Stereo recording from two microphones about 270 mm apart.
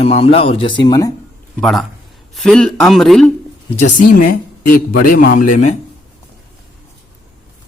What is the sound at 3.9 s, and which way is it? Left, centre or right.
Speech, left.